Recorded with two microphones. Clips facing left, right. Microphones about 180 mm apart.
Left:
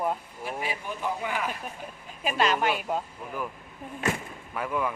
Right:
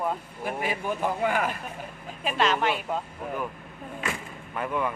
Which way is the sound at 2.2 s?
5° left (ahead or behind).